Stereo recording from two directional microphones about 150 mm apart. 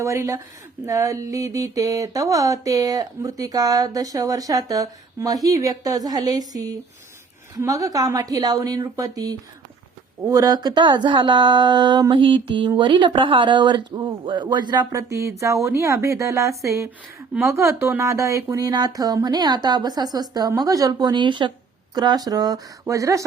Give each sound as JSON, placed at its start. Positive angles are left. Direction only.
{"t": 0.0, "sound": "mantra", "side_deg": -20}
{"t": 10.2, "sound": "speech", "side_deg": -25}
{"t": 15.4, "sound": "mantra", "side_deg": -20}